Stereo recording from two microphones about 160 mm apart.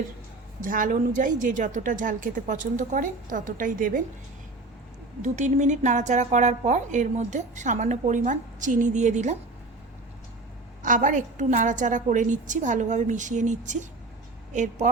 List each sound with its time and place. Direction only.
0.6 s a woman's voice: 55° right (ahead or behind)
5.2 s a woman's voice: 50° right (ahead or behind)
10.8 s a woman's voice: 55° right (ahead or behind)